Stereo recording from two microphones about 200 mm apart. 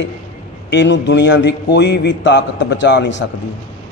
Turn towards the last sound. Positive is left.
turn(degrees=60)  # may be behind; listen again after turning